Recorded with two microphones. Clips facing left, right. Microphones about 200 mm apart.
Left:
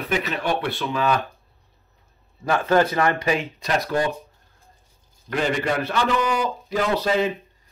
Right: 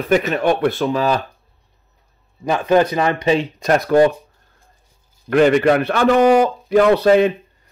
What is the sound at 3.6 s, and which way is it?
Speech, 50° right (ahead or behind).